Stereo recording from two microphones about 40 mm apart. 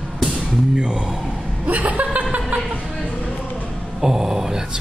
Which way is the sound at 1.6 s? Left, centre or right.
Right.